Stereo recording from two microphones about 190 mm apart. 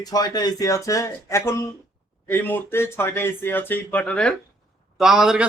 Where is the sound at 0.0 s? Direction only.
20° left (ahead or behind).